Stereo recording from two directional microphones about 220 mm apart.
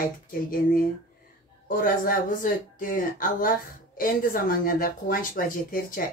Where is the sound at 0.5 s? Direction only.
40° left (ahead or behind).